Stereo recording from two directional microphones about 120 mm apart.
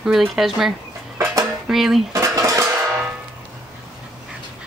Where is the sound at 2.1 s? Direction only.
25° right (ahead or behind).